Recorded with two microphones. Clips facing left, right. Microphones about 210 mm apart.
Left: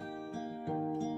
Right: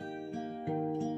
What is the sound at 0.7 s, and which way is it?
Music, 20° right (ahead or behind).